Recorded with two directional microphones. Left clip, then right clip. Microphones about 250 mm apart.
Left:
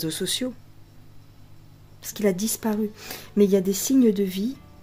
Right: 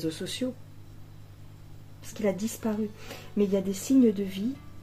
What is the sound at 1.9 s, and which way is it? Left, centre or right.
Speech, left.